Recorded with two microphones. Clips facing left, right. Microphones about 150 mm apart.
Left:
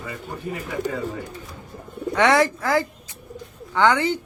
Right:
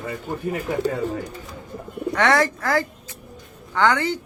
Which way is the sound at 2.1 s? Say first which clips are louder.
Left 2 dB; 15° left (ahead or behind).